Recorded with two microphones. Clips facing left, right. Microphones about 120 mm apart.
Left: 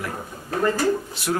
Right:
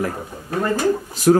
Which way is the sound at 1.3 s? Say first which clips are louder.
Right 11 dB; 45° right (ahead or behind).